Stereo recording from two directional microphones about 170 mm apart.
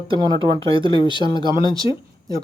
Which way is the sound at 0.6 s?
30° right (ahead or behind).